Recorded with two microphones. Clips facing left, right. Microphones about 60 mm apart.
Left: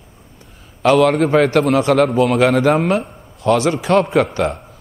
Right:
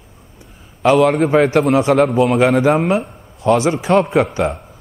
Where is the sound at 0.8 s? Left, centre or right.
Centre.